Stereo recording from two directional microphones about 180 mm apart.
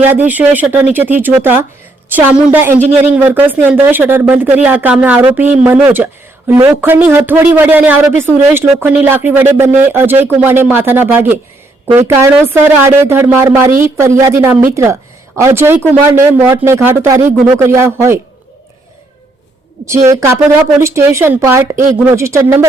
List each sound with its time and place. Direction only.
0.1 s a woman's voice: 10° right (ahead or behind)
20.1 s a woman's voice: 15° right (ahead or behind)